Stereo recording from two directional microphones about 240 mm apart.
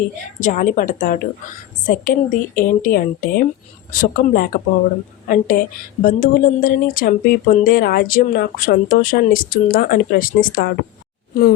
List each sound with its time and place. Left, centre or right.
0.3 s a woman's voice: left